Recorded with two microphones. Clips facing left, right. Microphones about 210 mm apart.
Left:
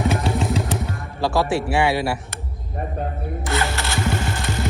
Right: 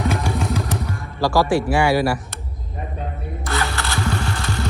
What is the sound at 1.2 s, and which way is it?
Speech, 25° left (ahead or behind).